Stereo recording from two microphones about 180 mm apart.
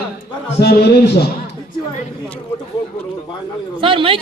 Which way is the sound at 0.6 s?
60° left (ahead or behind).